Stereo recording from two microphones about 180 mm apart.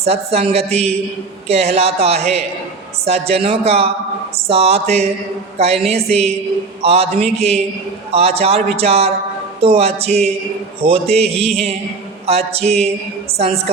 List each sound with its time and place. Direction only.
0.0 s a man's voice: 35° right (ahead or behind)